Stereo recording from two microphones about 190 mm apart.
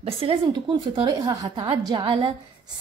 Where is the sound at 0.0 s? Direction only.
30° right (ahead or behind).